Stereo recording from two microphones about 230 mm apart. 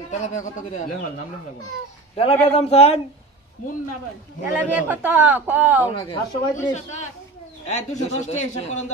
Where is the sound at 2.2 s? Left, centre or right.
Left.